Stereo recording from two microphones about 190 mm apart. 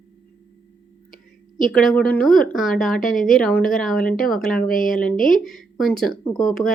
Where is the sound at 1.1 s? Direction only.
45° left (ahead or behind).